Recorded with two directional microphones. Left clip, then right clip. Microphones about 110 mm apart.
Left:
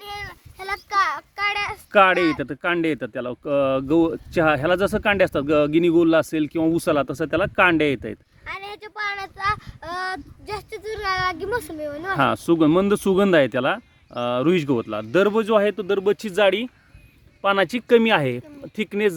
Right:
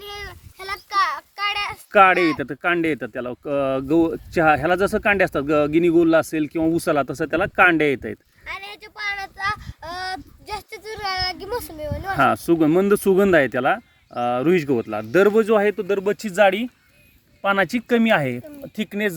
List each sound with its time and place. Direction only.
0.0 s child singing: 65° left (ahead or behind); by 1.8 s 35° left (ahead or behind)
1.9 s speech: 15° left (ahead or behind)
8.4 s speech: 40° left (ahead or behind)
12.2 s speech: 20° left (ahead or behind)
15.1 s a man's voice: 5° left (ahead or behind)
15.7 s speech: 20° left (ahead or behind)